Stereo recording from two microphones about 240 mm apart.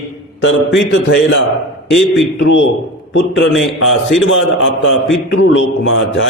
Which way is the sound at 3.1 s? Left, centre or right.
Left.